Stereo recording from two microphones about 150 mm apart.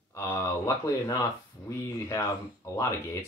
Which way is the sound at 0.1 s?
15° left (ahead or behind).